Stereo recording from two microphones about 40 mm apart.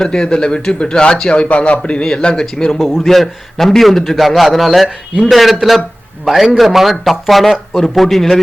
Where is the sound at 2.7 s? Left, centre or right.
Centre.